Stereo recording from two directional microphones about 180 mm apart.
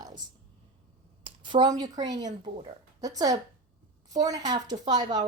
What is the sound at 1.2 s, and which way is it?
A woman's voice, 25° right (ahead or behind).